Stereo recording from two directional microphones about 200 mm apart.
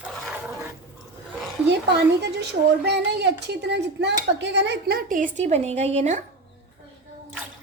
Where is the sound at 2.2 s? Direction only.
60° right (ahead or behind).